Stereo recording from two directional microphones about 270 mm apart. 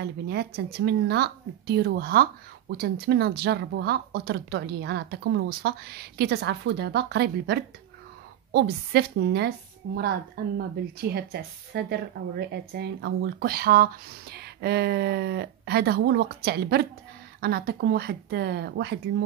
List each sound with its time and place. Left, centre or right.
0.0 s speech: right
11.7 s speech: right